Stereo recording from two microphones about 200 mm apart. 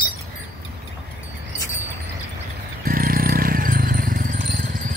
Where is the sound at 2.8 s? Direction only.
45° right (ahead or behind).